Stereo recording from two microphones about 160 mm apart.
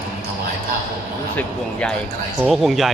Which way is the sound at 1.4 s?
5° left (ahead or behind).